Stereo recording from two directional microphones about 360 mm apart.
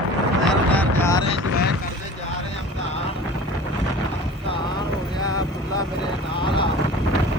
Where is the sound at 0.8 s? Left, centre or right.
Centre.